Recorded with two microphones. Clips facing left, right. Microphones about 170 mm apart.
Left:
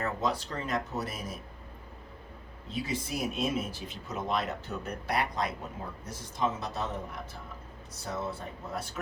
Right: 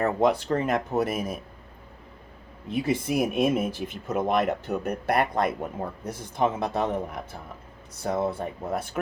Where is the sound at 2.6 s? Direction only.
55° right (ahead or behind).